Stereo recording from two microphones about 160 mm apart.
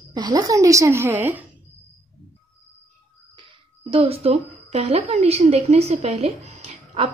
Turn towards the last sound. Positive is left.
turn(degrees=-40)  # may be behind; listen again after turning